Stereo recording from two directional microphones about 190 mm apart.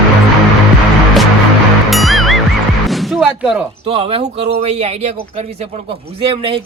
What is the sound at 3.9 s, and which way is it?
A man's voice, 30° right (ahead or behind).